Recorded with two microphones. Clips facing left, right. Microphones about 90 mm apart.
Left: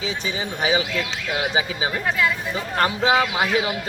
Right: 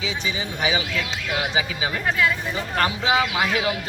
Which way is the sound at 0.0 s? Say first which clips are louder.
Left 1 dB; 40° left (ahead or behind).